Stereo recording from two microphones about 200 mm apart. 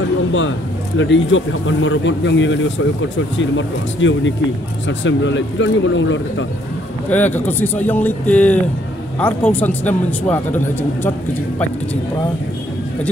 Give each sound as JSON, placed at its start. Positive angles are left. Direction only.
{"t": 0.9, "sound": "speech", "side_deg": 70}
{"t": 7.1, "sound": "speech", "side_deg": 10}